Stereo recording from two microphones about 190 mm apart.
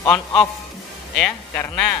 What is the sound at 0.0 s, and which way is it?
Speech, 15° left (ahead or behind).